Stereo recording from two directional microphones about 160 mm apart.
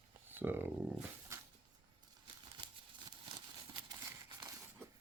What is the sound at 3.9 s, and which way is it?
Crumpling, 25° right (ahead or behind).